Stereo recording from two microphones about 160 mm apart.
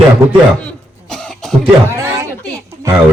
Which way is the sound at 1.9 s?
15° right (ahead or behind).